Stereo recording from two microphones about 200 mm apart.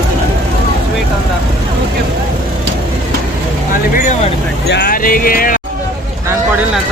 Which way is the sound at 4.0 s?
40° left (ahead or behind).